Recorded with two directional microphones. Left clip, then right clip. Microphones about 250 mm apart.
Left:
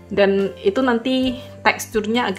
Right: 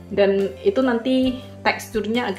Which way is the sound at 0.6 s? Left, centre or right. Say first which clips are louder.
Left 1 dB; centre.